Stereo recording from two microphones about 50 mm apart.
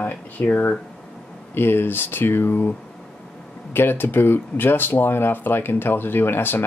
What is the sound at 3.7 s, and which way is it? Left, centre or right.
Speech, left.